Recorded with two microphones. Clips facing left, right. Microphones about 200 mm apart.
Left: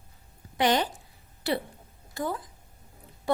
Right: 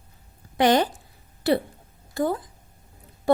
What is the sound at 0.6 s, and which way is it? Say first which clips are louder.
Speech: right 5 dB; 50° right (ahead or behind).